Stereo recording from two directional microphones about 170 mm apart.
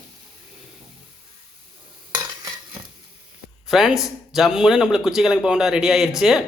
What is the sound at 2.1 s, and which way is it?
Stir, 25° right (ahead or behind).